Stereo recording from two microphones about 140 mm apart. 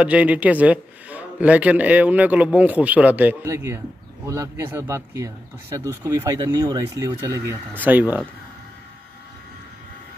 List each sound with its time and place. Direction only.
0.0 s a man's voice: 10° right (ahead or behind); by 7.5 s 25° right (ahead or behind)
7.8 s a man's voice: 10° right (ahead or behind)